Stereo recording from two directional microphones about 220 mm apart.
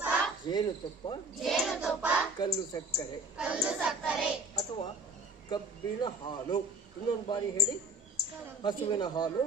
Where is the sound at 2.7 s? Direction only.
20° left (ahead or behind).